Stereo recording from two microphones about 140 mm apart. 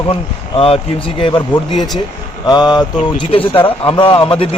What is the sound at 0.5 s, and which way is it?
Speech, 40° left (ahead or behind).